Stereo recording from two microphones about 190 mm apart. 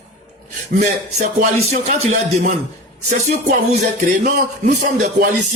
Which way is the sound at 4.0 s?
50° right (ahead or behind).